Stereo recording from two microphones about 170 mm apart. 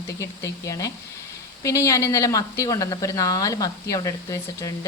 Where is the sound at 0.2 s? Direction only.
20° left (ahead or behind).